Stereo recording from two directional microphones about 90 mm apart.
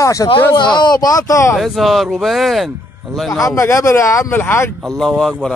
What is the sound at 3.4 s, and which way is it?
Speech, 35° left (ahead or behind).